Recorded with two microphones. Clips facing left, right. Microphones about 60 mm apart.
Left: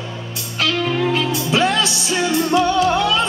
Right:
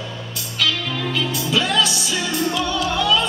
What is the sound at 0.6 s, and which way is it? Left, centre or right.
Music, left.